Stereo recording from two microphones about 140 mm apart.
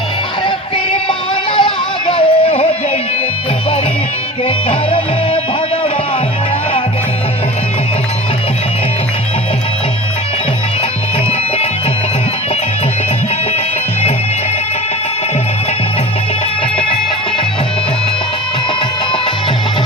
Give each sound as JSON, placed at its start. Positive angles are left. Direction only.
{"t": 1.5, "sound": "music", "side_deg": 35}
{"t": 4.4, "sound": "music", "side_deg": 40}